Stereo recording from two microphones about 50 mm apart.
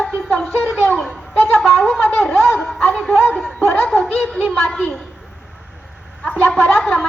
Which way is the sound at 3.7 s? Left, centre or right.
Centre.